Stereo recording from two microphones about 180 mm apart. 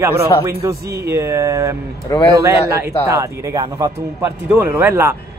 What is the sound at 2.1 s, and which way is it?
Speech, 20° left (ahead or behind).